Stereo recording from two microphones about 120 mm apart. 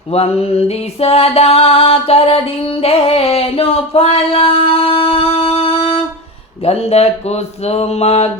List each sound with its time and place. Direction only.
0.1 s mantra: 55° left (ahead or behind)